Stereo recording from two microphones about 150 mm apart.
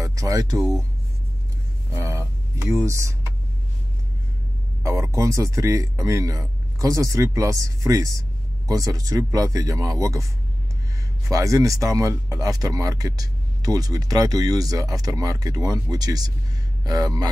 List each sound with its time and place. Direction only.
0.0 s music: 20° right (ahead or behind)
2.0 s music: 20° right (ahead or behind)
4.8 s speech: 20° right (ahead or behind)
11.2 s speech: 20° right (ahead or behind)